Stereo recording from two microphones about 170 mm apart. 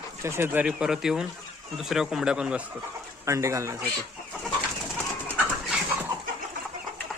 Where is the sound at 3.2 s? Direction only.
15° right (ahead or behind).